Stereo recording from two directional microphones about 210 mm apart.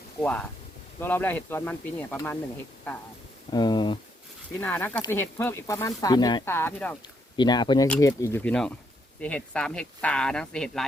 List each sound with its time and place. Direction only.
0.2 s speech: 5° left (ahead or behind)
3.5 s speech: 20° left (ahead or behind)
4.6 s speech: 5° left (ahead or behind)
7.3 s speech: 20° left (ahead or behind); by 10.8 s 5° left (ahead or behind)